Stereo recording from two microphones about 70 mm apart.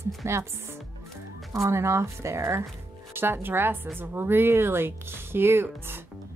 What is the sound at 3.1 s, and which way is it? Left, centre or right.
Speech, right.